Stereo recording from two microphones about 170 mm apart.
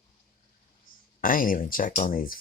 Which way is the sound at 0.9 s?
55° left (ahead or behind).